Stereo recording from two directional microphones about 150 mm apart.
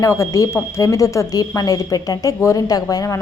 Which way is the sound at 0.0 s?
20° left (ahead or behind).